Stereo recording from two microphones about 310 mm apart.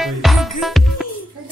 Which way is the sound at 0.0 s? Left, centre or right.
Centre.